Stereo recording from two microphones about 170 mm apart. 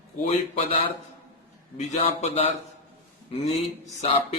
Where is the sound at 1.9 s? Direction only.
40° left (ahead or behind).